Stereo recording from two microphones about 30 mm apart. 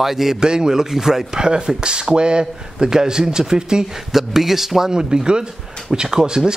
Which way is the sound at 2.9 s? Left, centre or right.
Right.